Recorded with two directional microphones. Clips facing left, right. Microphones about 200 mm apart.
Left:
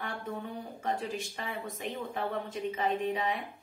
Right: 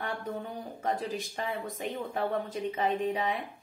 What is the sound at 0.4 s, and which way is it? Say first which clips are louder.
Speech: right 1 dB; 40° right (ahead or behind).